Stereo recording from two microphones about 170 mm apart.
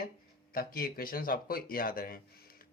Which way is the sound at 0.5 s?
60° left (ahead or behind).